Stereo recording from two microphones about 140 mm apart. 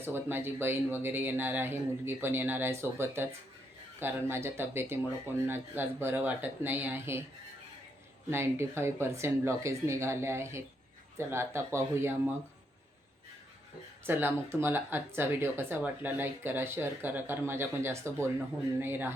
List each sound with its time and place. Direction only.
0.0 s speech: 15° right (ahead or behind)
8.3 s speech: 20° right (ahead or behind)
14.0 s speech: 15° right (ahead or behind)